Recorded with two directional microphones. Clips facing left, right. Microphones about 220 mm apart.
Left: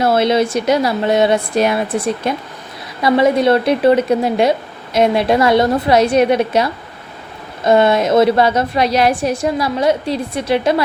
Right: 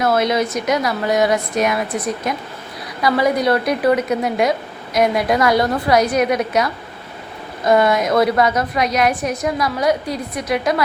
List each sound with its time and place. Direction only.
0.0 s a woman's voice: 30° left (ahead or behind)